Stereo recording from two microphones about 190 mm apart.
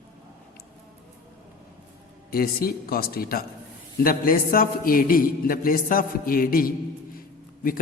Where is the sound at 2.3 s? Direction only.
50° left (ahead or behind).